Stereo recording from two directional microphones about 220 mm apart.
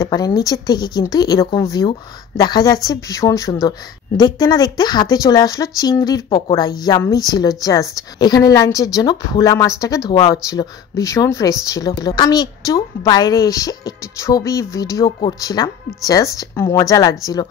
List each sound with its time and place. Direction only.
0.0 s a woman's voice: 15° left (ahead or behind)